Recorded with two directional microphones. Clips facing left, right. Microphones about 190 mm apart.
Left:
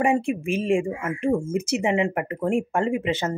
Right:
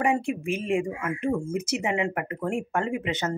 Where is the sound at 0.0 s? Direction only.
25° left (ahead or behind).